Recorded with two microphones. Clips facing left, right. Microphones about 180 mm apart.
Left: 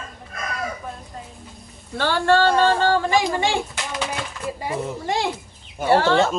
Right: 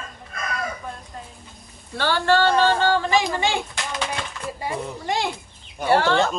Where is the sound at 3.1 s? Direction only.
15° left (ahead or behind).